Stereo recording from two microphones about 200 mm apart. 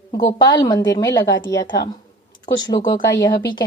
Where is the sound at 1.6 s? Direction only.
60° left (ahead or behind).